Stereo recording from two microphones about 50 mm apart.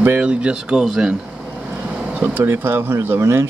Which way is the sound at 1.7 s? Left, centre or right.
Right.